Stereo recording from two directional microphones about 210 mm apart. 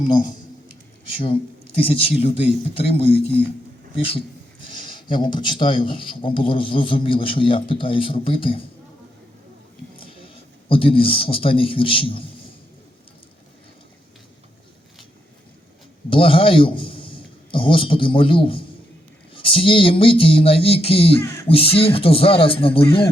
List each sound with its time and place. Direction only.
1.2 s speech: 25° left (ahead or behind)
10.0 s speech: 25° left (ahead or behind)
16.0 s a man's voice: 25° left (ahead or behind)